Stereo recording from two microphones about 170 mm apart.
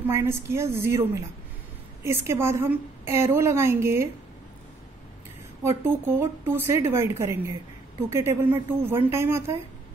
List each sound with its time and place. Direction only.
0.1 s a woman's voice: 15° right (ahead or behind)
5.6 s a woman's voice: 15° right (ahead or behind)